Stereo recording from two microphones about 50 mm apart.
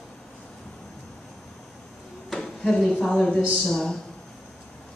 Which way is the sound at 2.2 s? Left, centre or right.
Centre.